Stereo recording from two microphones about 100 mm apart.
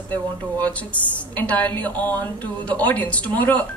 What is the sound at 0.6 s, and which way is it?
A woman's voice, 15° left (ahead or behind).